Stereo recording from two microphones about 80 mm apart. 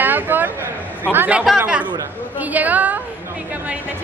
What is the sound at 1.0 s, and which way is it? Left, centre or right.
Speech, right.